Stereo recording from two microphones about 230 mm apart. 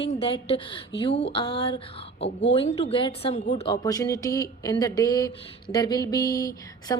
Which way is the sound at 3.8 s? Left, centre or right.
Centre.